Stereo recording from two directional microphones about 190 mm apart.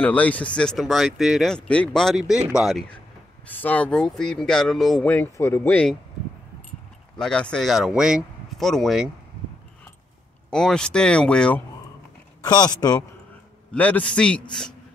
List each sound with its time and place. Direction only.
0.0 s speech: 5° left (ahead or behind)
7.2 s speech: 5° left (ahead or behind)
10.5 s speech: 5° left (ahead or behind)
12.4 s a man's voice: 20° left (ahead or behind)
13.7 s speech: 5° left (ahead or behind)